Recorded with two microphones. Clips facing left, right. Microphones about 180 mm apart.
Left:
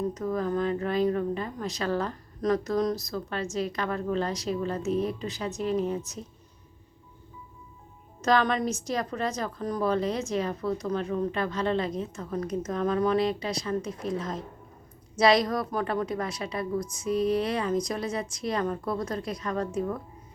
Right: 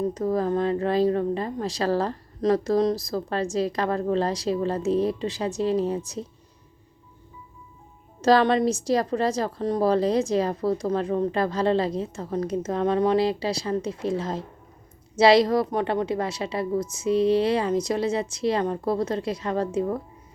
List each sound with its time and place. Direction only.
0.1 s a woman's voice: 35° right (ahead or behind)
8.2 s a woman's voice: 35° right (ahead or behind)